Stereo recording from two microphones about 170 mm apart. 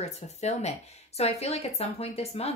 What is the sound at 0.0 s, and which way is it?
Speech, 40° left (ahead or behind).